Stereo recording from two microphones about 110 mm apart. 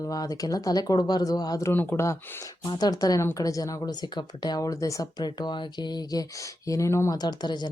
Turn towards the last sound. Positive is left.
turn(degrees=40)  # may be behind; listen again after turning